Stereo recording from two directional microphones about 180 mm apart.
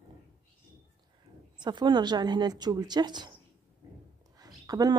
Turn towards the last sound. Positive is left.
turn(degrees=-20)  # may be behind; listen again after turning